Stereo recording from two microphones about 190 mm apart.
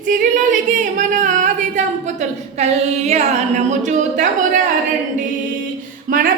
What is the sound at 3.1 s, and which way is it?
Speech, 35° right (ahead or behind).